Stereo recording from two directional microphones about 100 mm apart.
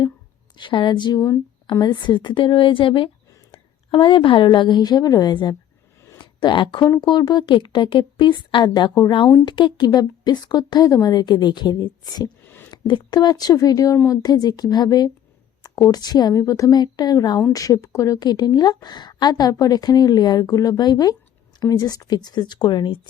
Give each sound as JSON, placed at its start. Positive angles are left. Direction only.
{"t": 0.5, "sound": "a woman's voice", "side_deg": 55}